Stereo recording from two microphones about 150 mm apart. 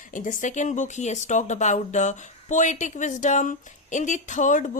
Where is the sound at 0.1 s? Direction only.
60° left (ahead or behind).